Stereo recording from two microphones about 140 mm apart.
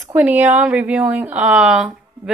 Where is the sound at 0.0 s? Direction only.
10° right (ahead or behind).